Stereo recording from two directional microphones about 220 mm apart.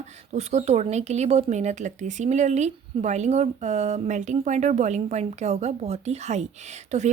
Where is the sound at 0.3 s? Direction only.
30° right (ahead or behind).